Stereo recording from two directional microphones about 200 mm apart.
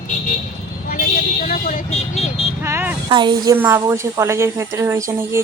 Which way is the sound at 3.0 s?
20° right (ahead or behind).